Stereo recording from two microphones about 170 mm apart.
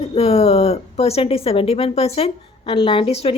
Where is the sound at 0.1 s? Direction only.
35° left (ahead or behind).